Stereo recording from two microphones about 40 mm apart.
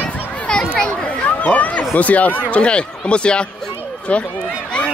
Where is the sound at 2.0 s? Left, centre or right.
Left.